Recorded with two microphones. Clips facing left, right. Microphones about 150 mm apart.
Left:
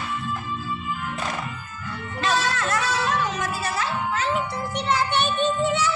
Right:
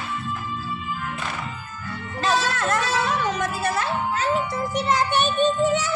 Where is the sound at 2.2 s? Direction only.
45° right (ahead or behind).